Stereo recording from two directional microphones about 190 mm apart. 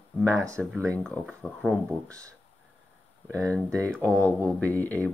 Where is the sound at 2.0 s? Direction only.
15° right (ahead or behind).